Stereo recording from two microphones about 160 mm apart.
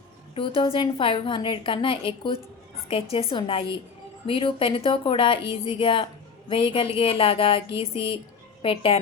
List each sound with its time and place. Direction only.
0.3 s a woman's voice: 35° left (ahead or behind)